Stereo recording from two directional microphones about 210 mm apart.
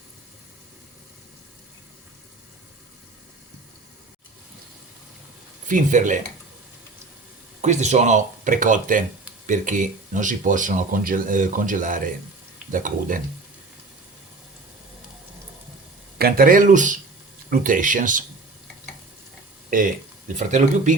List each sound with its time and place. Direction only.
5.6 s speech: 40° right (ahead or behind)
7.6 s speech: 35° right (ahead or behind)
16.1 s speech: 45° right (ahead or behind)
19.7 s speech: 40° right (ahead or behind)